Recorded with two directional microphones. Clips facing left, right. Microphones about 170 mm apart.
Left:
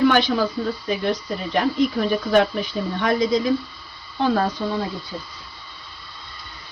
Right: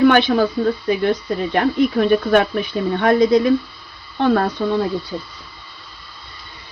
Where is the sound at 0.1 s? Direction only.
55° right (ahead or behind).